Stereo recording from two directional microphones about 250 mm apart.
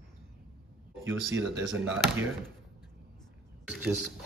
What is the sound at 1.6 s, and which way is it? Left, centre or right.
Speech, centre.